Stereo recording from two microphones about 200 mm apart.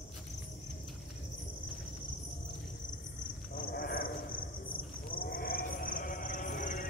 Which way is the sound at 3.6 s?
45° left (ahead or behind).